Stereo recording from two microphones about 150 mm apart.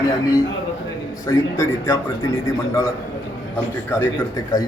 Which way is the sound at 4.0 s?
25° left (ahead or behind).